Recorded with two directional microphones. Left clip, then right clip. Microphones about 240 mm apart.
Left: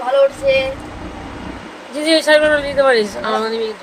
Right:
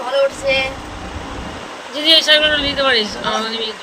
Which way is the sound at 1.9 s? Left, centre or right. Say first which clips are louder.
Right 1 dB; left.